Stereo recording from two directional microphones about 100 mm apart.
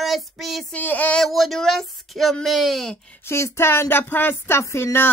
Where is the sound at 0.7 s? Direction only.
15° left (ahead or behind).